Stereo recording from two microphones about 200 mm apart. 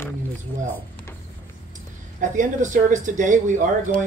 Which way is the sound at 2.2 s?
40° right (ahead or behind).